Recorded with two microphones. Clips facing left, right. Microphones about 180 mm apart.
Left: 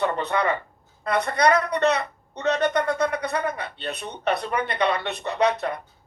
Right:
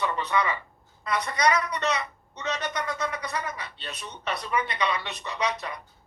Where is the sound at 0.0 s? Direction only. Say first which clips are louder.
Left 4 dB; 55° left (ahead or behind).